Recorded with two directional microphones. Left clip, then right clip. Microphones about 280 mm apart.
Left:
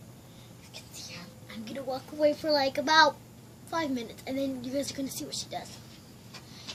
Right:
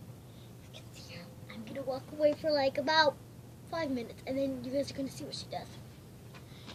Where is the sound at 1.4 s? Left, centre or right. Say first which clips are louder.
Left 4 dB; centre.